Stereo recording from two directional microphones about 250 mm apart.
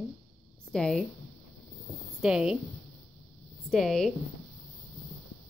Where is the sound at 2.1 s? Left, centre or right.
Centre.